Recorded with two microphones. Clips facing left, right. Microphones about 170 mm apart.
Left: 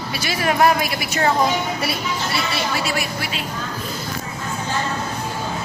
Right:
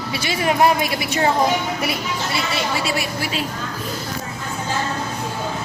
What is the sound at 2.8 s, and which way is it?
Speech, 35° right (ahead or behind).